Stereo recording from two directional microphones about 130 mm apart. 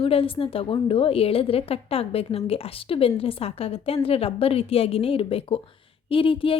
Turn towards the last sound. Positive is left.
turn(degrees=45)  # may be behind; listen again after turning